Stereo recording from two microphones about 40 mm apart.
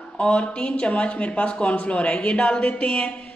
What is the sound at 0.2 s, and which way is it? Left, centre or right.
Speech, left.